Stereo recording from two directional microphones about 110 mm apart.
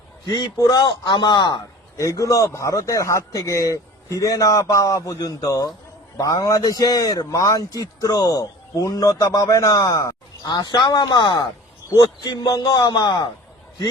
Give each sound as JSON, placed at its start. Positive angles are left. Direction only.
{"t": 0.5, "sound": "speech", "side_deg": 35}
{"t": 2.0, "sound": "speech", "side_deg": 30}